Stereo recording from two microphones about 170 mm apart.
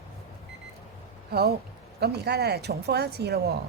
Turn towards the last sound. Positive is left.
turn(degrees=-70)  # may be behind; listen again after turning